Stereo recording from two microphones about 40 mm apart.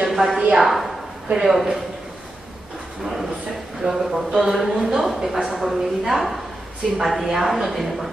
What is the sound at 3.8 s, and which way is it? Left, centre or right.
Speech, right.